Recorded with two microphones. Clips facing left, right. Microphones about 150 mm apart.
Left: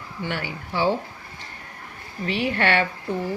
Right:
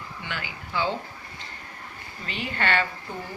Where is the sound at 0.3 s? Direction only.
55° left (ahead or behind).